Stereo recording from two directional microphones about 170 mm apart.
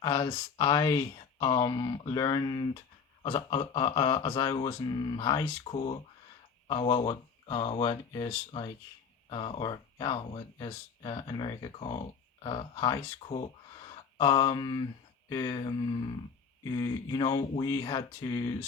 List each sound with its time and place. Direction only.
0.0 s music: 25° left (ahead or behind)
6.7 s speech: 30° left (ahead or behind)
9.3 s music: 30° left (ahead or behind)
11.6 s speech: 30° left (ahead or behind)
13.2 s speech: 35° left (ahead or behind)
15.3 s music: 25° left (ahead or behind)